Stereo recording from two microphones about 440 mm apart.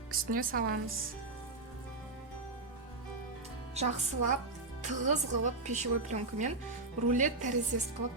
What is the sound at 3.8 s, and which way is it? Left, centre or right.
A woman's voice, centre.